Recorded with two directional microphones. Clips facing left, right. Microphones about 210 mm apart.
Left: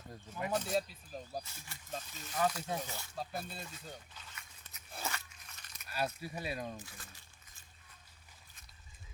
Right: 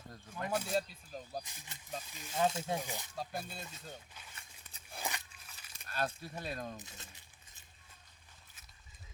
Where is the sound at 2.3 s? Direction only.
25° right (ahead or behind).